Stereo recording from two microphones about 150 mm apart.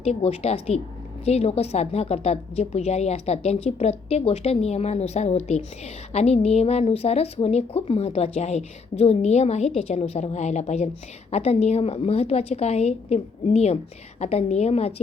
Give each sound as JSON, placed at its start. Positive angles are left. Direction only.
{"t": 0.0, "sound": "a woman's voice", "side_deg": 45}